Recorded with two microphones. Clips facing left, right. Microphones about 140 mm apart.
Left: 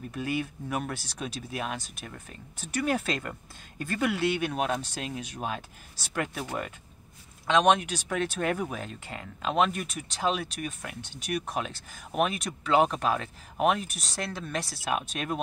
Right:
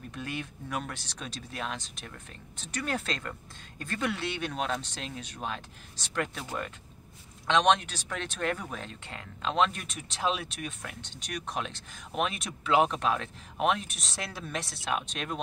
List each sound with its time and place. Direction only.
0.1 s speech: 5° left (ahead or behind)
7.4 s speech: 5° left (ahead or behind)